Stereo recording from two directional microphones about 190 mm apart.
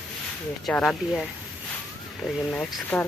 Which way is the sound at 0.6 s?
5° left (ahead or behind).